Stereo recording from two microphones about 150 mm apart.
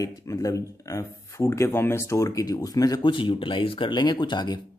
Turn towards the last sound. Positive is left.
turn(degrees=30)  # may be behind; listen again after turning